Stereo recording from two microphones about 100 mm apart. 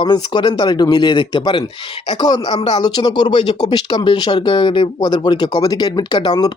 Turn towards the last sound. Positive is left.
turn(degrees=45)  # may be behind; listen again after turning